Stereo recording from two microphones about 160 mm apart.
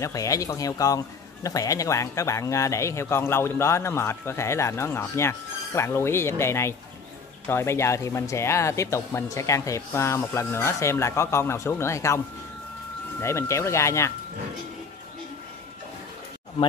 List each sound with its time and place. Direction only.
0.0 s a man's voice: 20° left (ahead or behind)
13.2 s speech: 15° left (ahead or behind)